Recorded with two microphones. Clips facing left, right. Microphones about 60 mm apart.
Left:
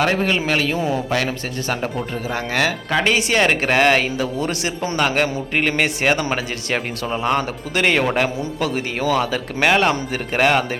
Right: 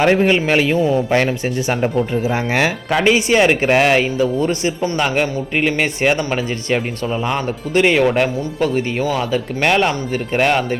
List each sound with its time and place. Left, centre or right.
0.0 s a man's voice: centre
2.3 s speech: right
2.9 s speech: centre